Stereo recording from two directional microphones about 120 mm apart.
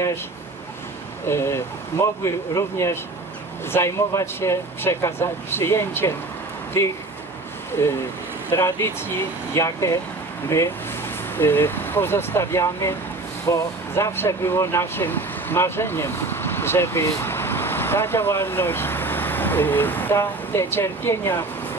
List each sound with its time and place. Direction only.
1.2 s speech: 20° left (ahead or behind)